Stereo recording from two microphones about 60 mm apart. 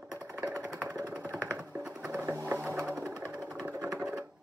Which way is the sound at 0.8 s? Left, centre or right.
Right.